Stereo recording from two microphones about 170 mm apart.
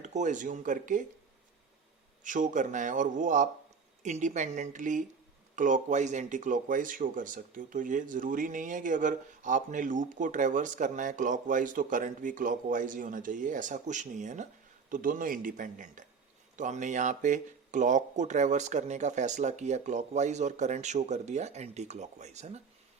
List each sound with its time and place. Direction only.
0.0 s speech: 45° right (ahead or behind)
2.2 s speech: 50° right (ahead or behind)